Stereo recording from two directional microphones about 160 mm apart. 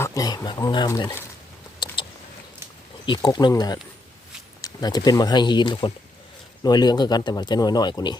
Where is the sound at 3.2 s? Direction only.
25° left (ahead or behind).